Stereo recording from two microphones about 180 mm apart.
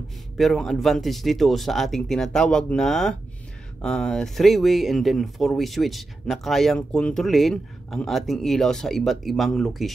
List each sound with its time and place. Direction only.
0.4 s speech: centre (ahead or behind)